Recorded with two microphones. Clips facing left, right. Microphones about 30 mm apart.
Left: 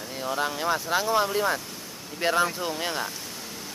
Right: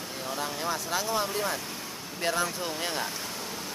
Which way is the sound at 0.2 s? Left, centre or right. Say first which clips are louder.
Left 6 dB; centre.